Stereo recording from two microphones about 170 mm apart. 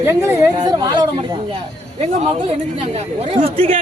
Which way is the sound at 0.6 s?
25° right (ahead or behind).